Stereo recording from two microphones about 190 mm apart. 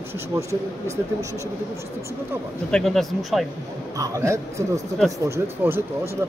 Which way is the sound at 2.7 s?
Centre (ahead or behind).